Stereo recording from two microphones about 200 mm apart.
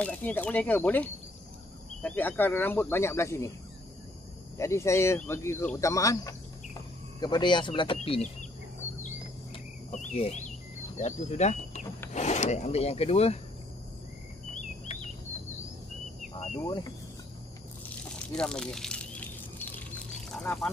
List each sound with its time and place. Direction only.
0.0 s speech: 10° left (ahead or behind)
4.6 s speech: 15° left (ahead or behind); by 8.5 s 30° left (ahead or behind)
9.8 s speech: 35° left (ahead or behind)
14.5 s a sound: 35° left (ahead or behind)
16.5 s speech: 20° left (ahead or behind)
18.2 s a sound: 5° left (ahead or behind)
20.3 s speech: centre (ahead or behind)